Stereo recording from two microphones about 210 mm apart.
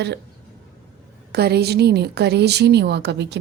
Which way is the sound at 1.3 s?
50° right (ahead or behind).